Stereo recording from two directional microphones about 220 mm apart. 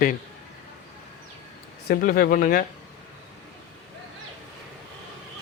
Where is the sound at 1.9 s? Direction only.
40° left (ahead or behind).